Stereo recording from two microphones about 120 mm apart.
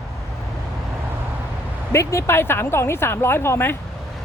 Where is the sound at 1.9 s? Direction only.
25° left (ahead or behind).